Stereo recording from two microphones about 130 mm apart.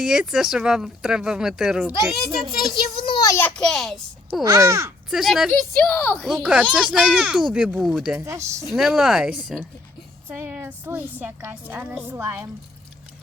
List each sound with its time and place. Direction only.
0.0 s speech: 5° right (ahead or behind)
3.2 s a child's voice: 25° left (ahead or behind)
3.4 s speech: 5° left (ahead or behind)
4.4 s speech: 25° right (ahead or behind)
5.1 s speech: centre (ahead or behind)
5.8 s a woman's voice: 10° left (ahead or behind)
6.2 s a woman's voice: 5° right (ahead or behind)
8.2 s speech: 25° right (ahead or behind)
8.7 s speech: centre (ahead or behind)
10.2 s a woman's voice: 15° right (ahead or behind)